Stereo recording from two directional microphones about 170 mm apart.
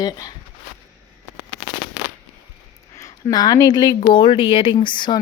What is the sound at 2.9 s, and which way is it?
Speech, 20° left (ahead or behind).